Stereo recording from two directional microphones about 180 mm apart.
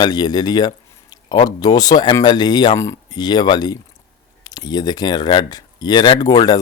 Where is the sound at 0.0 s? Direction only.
20° left (ahead or behind).